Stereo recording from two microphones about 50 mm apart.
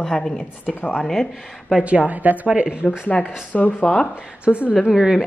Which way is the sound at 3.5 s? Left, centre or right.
Left.